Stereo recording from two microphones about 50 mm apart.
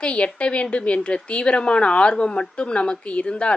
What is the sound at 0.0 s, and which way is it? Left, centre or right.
A woman's voice, left.